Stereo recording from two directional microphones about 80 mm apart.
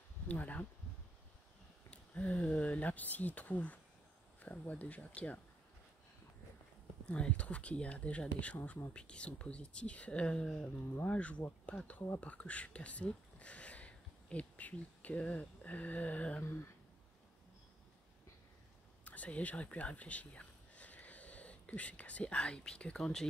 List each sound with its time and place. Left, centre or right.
0.3 s speech: left
1.9 s speech: centre
7.1 s speech: centre
19.0 s speech: centre